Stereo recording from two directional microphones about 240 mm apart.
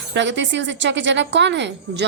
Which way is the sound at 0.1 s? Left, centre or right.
Right.